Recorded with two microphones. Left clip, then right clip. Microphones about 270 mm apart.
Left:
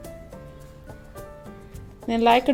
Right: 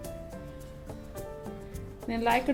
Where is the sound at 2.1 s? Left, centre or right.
Left.